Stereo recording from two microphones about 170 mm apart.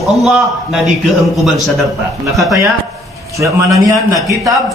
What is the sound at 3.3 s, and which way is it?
A man's voice, 20° right (ahead or behind).